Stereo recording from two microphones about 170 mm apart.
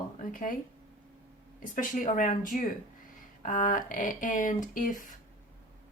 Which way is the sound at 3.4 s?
50° left (ahead or behind).